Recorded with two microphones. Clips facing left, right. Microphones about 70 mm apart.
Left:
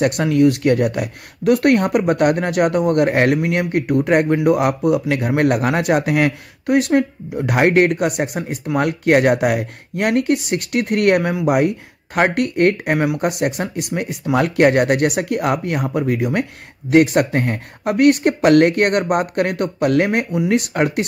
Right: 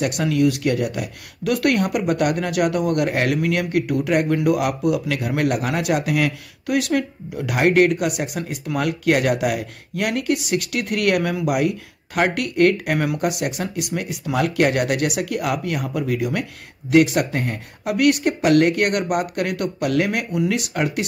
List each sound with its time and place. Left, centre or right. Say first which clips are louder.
0.0 s speech: left 4 dB; left
1.5 s speech: left 5 dB; left